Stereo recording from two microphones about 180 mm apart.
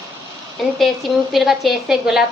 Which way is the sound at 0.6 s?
Centre (ahead or behind).